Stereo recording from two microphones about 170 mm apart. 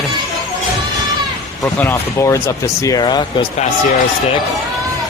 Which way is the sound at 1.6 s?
15° left (ahead or behind).